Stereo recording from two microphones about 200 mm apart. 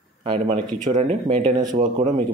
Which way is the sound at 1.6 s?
20° right (ahead or behind).